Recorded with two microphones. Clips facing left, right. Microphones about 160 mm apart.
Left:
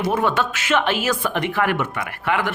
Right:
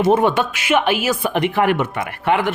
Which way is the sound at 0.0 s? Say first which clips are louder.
Right 5 dB; 20° right (ahead or behind).